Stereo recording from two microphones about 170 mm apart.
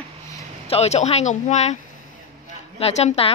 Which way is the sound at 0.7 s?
40° left (ahead or behind).